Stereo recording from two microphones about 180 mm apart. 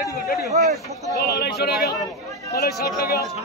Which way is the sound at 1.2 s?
60° left (ahead or behind).